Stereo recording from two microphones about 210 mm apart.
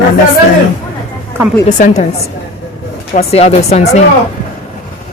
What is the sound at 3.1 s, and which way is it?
Speech, 30° left (ahead or behind).